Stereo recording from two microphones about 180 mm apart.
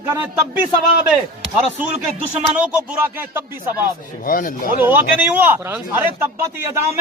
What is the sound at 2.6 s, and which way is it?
Speech, 10° right (ahead or behind).